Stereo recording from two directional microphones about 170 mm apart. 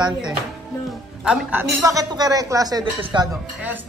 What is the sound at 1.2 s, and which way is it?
Speech, 10° right (ahead or behind).